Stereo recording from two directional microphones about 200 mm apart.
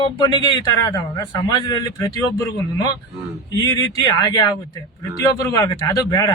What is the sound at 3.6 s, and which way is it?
Speech, 20° left (ahead or behind).